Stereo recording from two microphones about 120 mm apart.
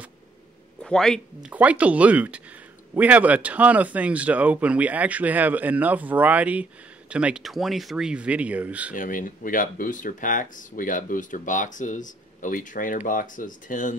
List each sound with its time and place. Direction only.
0.8 s speech: 5° left (ahead or behind)
1.4 s speech: 10° right (ahead or behind)
9.6 s speech: 90° left